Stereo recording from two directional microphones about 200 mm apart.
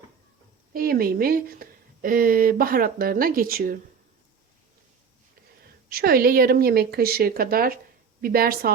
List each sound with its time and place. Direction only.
0.7 s speech: 50° right (ahead or behind)
5.9 s speech: 50° right (ahead or behind)